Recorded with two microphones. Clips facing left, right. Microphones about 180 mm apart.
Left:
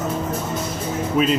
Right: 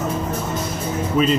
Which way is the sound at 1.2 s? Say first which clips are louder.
Right 1 dB; 10° left (ahead or behind).